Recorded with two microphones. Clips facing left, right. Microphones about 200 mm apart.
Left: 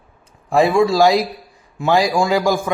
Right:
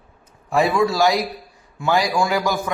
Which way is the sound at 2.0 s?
25° left (ahead or behind).